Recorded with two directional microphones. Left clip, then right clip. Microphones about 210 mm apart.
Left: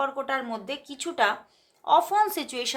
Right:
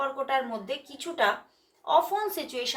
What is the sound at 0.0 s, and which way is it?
A woman's voice, 40° left (ahead or behind).